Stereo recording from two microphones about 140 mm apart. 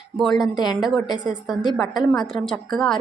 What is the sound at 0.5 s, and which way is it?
Speech, 30° left (ahead or behind).